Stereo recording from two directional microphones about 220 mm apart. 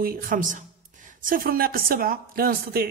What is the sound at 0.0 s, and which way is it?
Speech, 40° right (ahead or behind).